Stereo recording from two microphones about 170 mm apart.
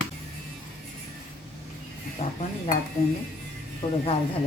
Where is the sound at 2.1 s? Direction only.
45° left (ahead or behind).